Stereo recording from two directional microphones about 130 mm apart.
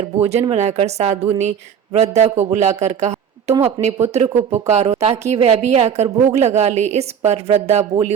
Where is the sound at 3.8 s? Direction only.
60° right (ahead or behind).